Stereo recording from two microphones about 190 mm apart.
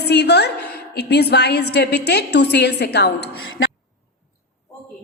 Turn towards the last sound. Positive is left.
turn(degrees=60)  # may be behind; listen again after turning